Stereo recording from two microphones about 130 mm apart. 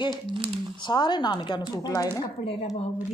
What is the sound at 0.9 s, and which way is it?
Speech, 35° left (ahead or behind).